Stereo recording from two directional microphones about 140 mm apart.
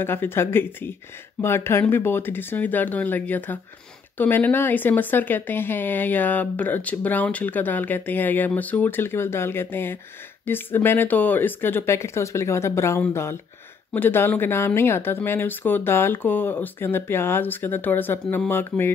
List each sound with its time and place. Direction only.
0.0 s speech: 15° left (ahead or behind)